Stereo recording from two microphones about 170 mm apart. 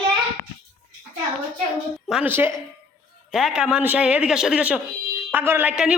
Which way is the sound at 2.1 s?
10° right (ahead or behind).